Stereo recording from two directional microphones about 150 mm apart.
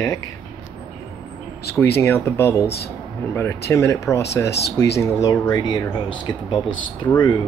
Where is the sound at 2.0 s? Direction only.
15° left (ahead or behind).